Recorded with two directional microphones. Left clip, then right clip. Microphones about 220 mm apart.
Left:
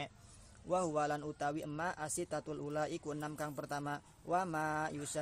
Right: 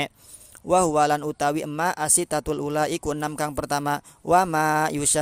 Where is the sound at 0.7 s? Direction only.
45° right (ahead or behind).